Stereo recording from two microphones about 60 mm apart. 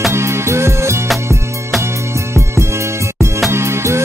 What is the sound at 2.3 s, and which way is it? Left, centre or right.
Music, right.